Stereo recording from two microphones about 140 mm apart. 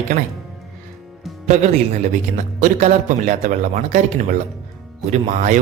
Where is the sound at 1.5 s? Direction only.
60° right (ahead or behind).